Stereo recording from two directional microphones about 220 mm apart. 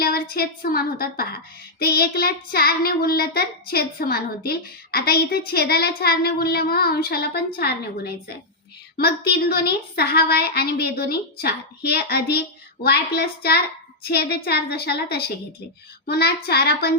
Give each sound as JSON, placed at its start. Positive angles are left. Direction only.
{"t": 0.0, "sound": "child singing", "side_deg": 45}